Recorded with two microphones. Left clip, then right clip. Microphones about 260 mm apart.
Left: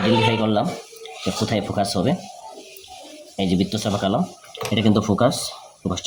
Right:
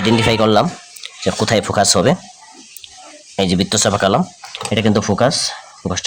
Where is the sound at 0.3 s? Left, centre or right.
Right.